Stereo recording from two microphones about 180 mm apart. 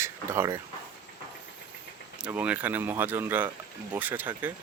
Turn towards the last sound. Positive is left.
turn(degrees=-10)  # may be behind; listen again after turning